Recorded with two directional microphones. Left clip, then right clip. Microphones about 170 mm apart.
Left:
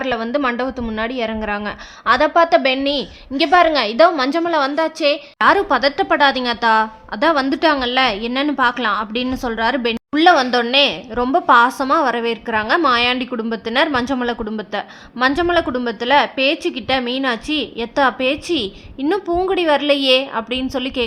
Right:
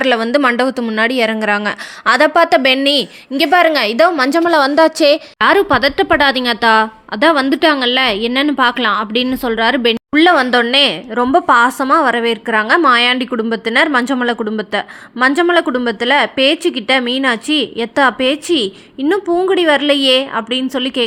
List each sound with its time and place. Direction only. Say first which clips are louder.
0.0 s a woman's voice: right 7 dB; 30° right (ahead or behind)
4.4 s a woman's voice: right 7 dB; 40° right (ahead or behind)
5.4 s a woman's voice: right 1 dB; 15° right (ahead or behind)